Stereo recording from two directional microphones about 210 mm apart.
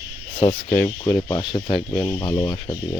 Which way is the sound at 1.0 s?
20° left (ahead or behind).